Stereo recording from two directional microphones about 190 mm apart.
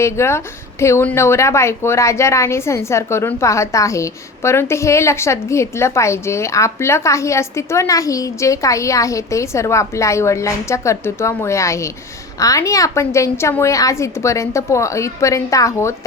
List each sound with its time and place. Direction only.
0.0 s a woman's voice: 15° left (ahead or behind)